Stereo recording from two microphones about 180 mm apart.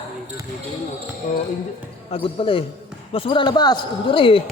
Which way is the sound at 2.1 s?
30° left (ahead or behind).